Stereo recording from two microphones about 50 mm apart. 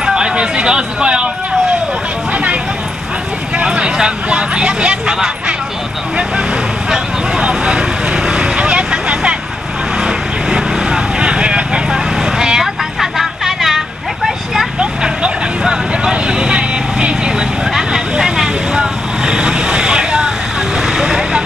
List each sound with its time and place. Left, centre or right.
0.0 s a sound: centre
3.5 s speech: centre
6.9 s vehicle: centre
14.8 s vehicle: centre